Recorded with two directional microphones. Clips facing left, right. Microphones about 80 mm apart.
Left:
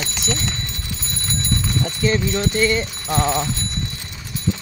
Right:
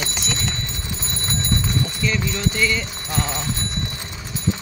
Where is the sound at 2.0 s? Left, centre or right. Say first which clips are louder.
Left 4 dB; left.